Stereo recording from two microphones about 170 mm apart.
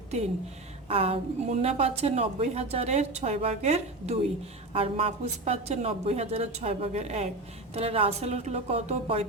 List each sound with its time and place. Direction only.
0.9 s a woman's voice: 35° right (ahead or behind)